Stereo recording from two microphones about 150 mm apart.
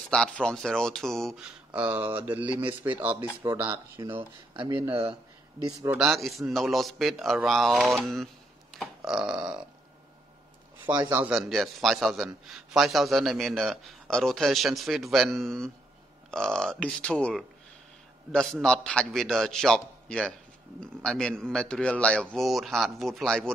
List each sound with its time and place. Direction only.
0.1 s a man's voice: 5° left (ahead or behind)
1.7 s speech: 10° right (ahead or behind)
5.6 s speech: 25° right (ahead or behind)
5.9 s a man's voice: 5° right (ahead or behind)
8.7 s burping: 5° right (ahead or behind)
11.1 s speech: 15° right (ahead or behind)
11.3 s a man's voice: centre (ahead or behind)